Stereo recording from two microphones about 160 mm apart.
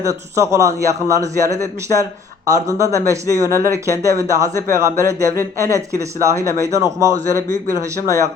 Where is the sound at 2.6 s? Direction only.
20° right (ahead or behind).